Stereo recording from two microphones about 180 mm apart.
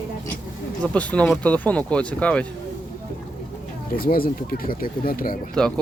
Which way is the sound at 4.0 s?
55° left (ahead or behind).